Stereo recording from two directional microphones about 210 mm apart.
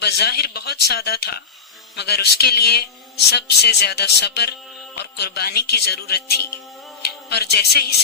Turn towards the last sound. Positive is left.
turn(degrees=50)  # may be behind; listen again after turning